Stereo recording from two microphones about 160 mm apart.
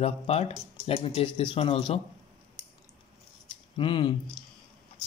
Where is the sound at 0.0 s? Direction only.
40° left (ahead or behind).